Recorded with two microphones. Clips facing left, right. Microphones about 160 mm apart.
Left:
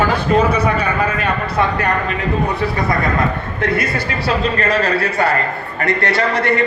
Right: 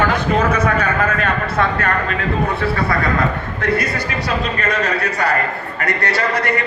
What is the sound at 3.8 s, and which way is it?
A man's voice, 25° left (ahead or behind).